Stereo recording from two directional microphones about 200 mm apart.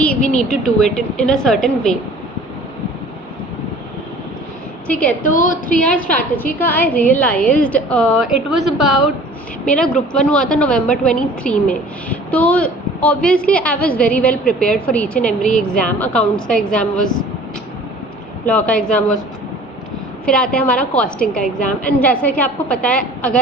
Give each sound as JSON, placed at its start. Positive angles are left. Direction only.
{"t": 0.0, "sound": "a woman's voice", "side_deg": 5}
{"t": 4.9, "sound": "a woman's voice", "side_deg": 5}
{"t": 5.2, "sound": "a woman's voice", "side_deg": 40}
{"t": 5.8, "sound": "a woman's voice", "side_deg": 5}
{"t": 18.4, "sound": "a woman's voice", "side_deg": 5}
{"t": 20.2, "sound": "a woman's voice", "side_deg": 5}